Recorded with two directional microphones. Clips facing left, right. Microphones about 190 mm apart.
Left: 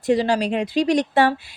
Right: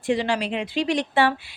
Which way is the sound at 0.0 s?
40° left (ahead or behind).